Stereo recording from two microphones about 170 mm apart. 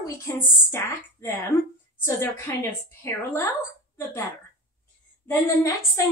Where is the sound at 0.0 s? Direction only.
15° left (ahead or behind).